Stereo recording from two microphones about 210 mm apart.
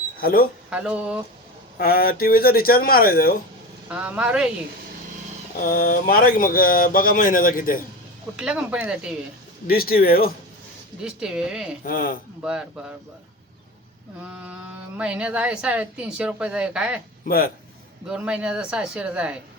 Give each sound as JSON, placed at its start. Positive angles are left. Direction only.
{"t": 0.2, "sound": "speech", "side_deg": 45}
{"t": 0.7, "sound": "speech", "side_deg": -5}
{"t": 1.8, "sound": "speech", "side_deg": 45}
{"t": 3.8, "sound": "speech", "side_deg": -5}
{"t": 5.7, "sound": "speech", "side_deg": 45}
{"t": 8.4, "sound": "speech", "side_deg": -5}
{"t": 9.6, "sound": "speech", "side_deg": 45}
{"t": 11.0, "sound": "speech", "side_deg": -5}
{"t": 11.9, "sound": "speech", "side_deg": 45}
{"t": 12.4, "sound": "speech", "side_deg": -5}
{"t": 14.2, "sound": "speech", "side_deg": -5}
{"t": 17.2, "sound": "speech", "side_deg": 45}
{"t": 18.1, "sound": "speech", "side_deg": -5}